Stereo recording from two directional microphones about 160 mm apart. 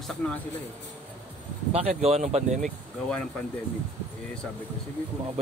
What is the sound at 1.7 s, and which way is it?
Speech, 40° right (ahead or behind).